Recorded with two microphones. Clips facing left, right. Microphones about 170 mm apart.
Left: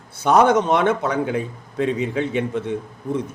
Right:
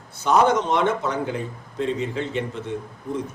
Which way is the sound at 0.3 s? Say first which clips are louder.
Left 3 dB; 60° left (ahead or behind).